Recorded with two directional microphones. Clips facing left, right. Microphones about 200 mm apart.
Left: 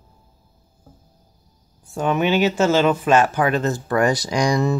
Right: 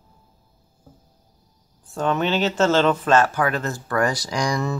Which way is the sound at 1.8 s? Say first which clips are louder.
Left 2 dB; 10° left (ahead or behind).